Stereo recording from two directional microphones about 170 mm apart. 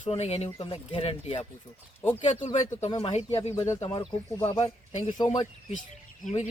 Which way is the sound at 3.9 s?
25° left (ahead or behind).